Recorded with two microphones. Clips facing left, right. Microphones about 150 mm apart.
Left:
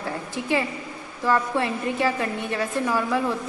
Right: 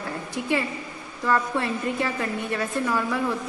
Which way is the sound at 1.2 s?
20° left (ahead or behind).